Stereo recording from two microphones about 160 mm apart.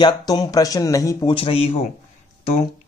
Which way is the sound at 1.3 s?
35° left (ahead or behind).